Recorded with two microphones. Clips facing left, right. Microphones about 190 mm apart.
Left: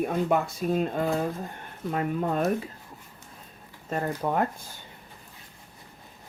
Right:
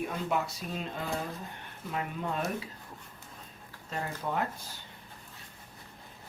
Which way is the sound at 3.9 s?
50° left (ahead or behind).